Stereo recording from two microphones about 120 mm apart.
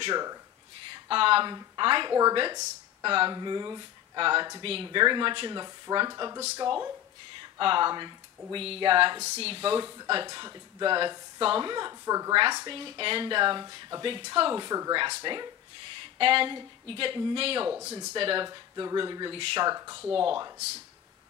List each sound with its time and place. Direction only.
0.1 s speech: 30° right (ahead or behind)
0.9 s speech: 50° right (ahead or behind); by 6.9 s 30° right (ahead or behind)
7.5 s speech: 45° right (ahead or behind)
12.6 s speech: 45° right (ahead or behind)
17.6 s speech: 20° right (ahead or behind)
18.1 s speech: 45° right (ahead or behind)
18.5 s speech: 35° right (ahead or behind)
19.3 s speech: 50° right (ahead or behind)
19.7 s speech: 30° right (ahead or behind)